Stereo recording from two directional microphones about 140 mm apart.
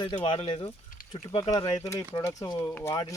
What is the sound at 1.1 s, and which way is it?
Speech, 30° left (ahead or behind).